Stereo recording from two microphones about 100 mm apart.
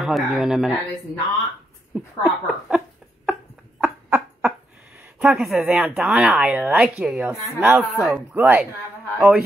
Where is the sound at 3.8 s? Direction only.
15° right (ahead or behind).